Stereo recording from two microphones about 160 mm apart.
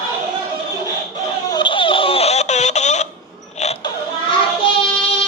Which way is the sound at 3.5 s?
45° left (ahead or behind).